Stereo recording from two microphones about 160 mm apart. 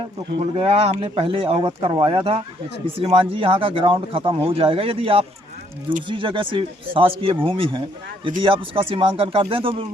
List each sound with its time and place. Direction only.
0.3 s speech: 35° right (ahead or behind)